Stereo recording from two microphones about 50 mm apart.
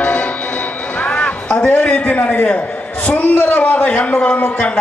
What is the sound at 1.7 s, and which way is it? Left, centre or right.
A man's voice, left.